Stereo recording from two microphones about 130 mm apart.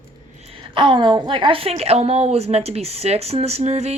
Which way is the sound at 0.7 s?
40° right (ahead or behind).